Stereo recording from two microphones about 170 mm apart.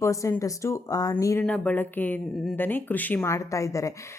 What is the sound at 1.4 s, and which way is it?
A woman's voice, 5° left (ahead or behind).